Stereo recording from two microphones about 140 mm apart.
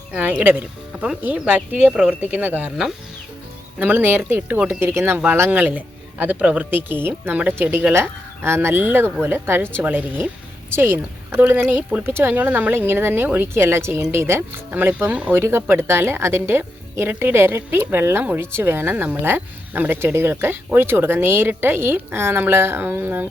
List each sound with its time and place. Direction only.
0.1 s speech: 10° right (ahead or behind)